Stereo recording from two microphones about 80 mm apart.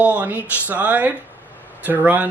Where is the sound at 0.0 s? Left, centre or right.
Centre.